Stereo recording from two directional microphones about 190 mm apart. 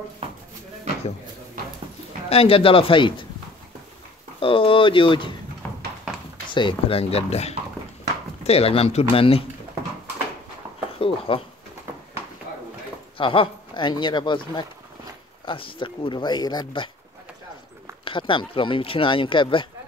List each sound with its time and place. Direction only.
2.2 s speech: 30° left (ahead or behind)
4.4 s speech: 30° left (ahead or behind)
6.5 s speech: 25° left (ahead or behind)
11.0 s speech: 30° left (ahead or behind)
13.2 s speech: 25° left (ahead or behind)
18.0 s speech: 25° left (ahead or behind)